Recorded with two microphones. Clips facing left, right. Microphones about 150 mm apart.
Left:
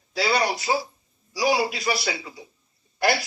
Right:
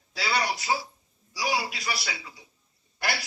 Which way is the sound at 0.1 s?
30° left (ahead or behind).